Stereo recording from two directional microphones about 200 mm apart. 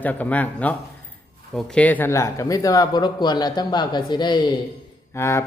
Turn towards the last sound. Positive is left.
turn(degrees=15)  # may be behind; listen again after turning